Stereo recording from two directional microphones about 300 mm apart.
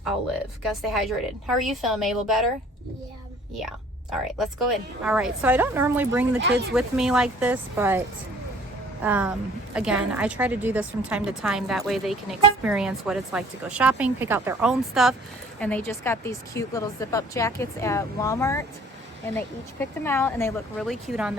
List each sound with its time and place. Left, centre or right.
0.6 s a woman's voice: centre
3.6 s a woman's voice: centre
6.4 s speech: right
6.7 s a woman's voice: centre
9.0 s a woman's voice: centre